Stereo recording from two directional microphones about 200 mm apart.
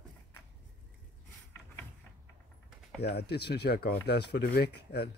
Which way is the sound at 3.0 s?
55° left (ahead or behind).